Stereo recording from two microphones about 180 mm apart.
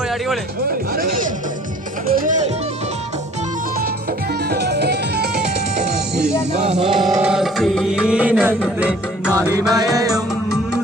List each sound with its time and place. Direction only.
2.1 s speech: 45° right (ahead or behind)
4.4 s music: 65° right (ahead or behind)
6.8 s mantra: centre (ahead or behind)
7.2 s music: 5° right (ahead or behind); by 10.2 s 20° right (ahead or behind)